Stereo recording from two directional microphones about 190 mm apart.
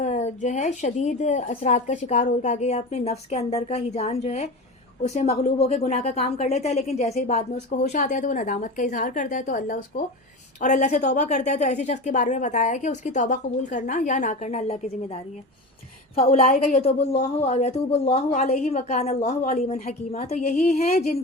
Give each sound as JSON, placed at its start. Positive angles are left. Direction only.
{"t": 0.0, "sound": "a woman's voice", "side_deg": 35}